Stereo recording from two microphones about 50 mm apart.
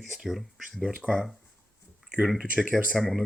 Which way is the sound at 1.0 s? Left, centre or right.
Right.